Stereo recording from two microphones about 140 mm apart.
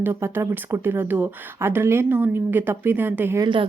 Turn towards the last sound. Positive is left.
turn(degrees=-15)  # may be behind; listen again after turning